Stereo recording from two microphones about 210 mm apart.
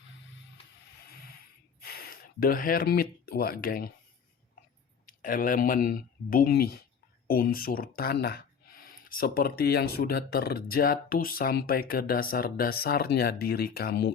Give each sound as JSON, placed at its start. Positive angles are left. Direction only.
{"t": 1.0, "sound": "a sound", "side_deg": 45}
{"t": 1.8, "sound": "speech", "side_deg": 45}
{"t": 5.0, "sound": "speech", "side_deg": 40}